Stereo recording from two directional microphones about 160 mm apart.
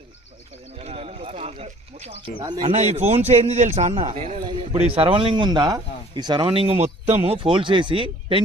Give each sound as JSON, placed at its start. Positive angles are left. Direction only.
{"t": 0.8, "sound": "a sound", "side_deg": -40}
{"t": 2.4, "sound": "speech", "side_deg": -30}
{"t": 3.0, "sound": "a man's voice", "side_deg": -40}